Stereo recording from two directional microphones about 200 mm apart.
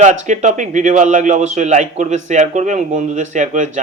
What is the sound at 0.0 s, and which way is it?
A man's voice, 35° right (ahead or behind).